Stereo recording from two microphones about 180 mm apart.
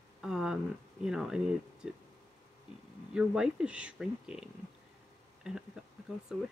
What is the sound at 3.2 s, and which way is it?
Speech, 5° right (ahead or behind).